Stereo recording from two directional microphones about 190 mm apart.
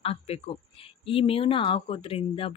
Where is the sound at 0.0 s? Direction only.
30° left (ahead or behind).